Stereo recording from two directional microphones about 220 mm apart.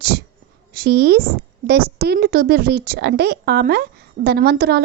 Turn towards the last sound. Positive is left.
turn(degrees=-45)  # may be behind; listen again after turning